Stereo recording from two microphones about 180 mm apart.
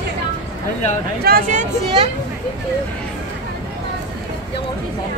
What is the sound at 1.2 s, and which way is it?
Speech, 50° right (ahead or behind).